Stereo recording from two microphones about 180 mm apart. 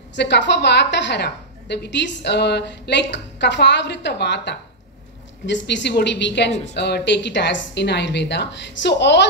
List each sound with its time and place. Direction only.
0.1 s a woman's voice: 75° left (ahead or behind)